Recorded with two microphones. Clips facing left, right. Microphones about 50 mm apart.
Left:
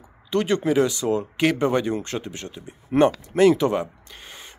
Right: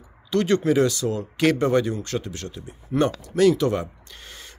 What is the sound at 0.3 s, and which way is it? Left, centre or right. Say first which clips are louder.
Speech: right 1 dB; centre.